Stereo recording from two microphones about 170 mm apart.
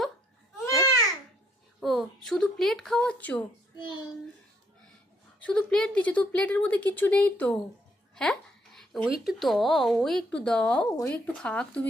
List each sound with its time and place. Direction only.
0.6 s babbling: 20° left (ahead or behind)
1.8 s speech: centre (ahead or behind)
5.4 s a child's voice: 5° left (ahead or behind)